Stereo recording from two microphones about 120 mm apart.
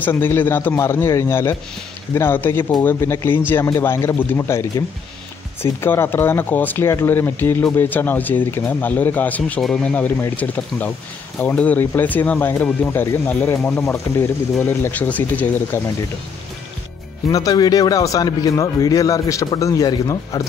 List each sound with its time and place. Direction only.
0.0 s a man's voice: 15° left (ahead or behind)
17.3 s a man's voice: 30° left (ahead or behind)